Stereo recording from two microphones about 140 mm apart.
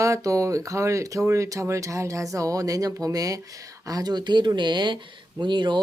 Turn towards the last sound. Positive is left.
turn(degrees=-35)  # may be behind; listen again after turning